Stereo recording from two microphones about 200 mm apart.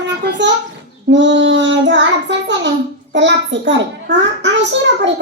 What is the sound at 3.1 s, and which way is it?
A child's voice, 65° right (ahead or behind).